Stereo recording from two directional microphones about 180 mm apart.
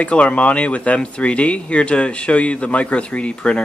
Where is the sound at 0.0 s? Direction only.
5° left (ahead or behind).